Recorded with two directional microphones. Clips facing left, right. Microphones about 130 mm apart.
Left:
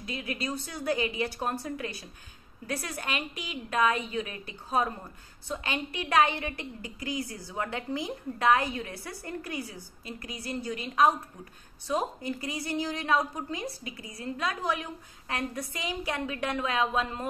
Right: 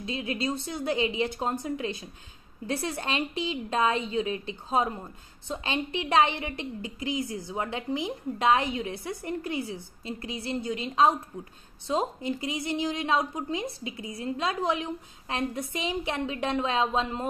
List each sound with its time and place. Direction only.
0.0 s a woman's voice: 25° right (ahead or behind)